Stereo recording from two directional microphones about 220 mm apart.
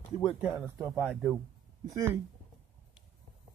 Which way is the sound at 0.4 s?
10° right (ahead or behind).